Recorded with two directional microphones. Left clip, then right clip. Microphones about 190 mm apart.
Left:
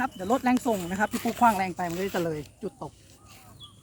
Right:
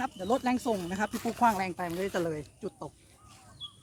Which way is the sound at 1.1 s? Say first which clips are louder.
Left 4 dB; 25° left (ahead or behind).